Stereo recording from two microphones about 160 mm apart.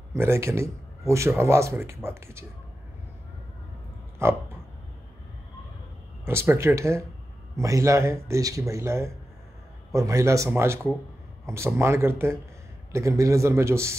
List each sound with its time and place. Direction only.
0.1 s speech: 15° right (ahead or behind)
4.2 s speech: 15° right (ahead or behind)
6.2 s speech: 15° right (ahead or behind)